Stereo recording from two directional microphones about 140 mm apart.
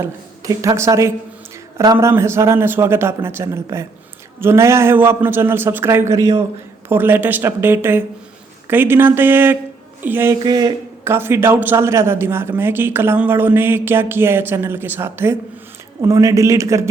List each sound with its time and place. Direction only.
0.0 s a man's voice: 25° right (ahead or behind)
10.4 s speech: 30° right (ahead or behind)
11.0 s a man's voice: 15° right (ahead or behind)